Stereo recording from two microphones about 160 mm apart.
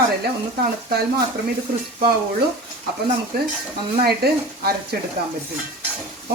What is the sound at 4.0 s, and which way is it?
Speech, 75° right (ahead or behind).